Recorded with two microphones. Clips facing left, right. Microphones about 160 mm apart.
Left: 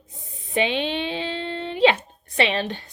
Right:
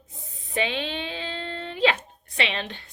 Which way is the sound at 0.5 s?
25° left (ahead or behind).